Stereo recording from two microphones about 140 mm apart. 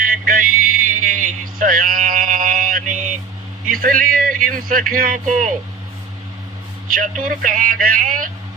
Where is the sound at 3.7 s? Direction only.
85° right; by 5.5 s 65° right (ahead or behind).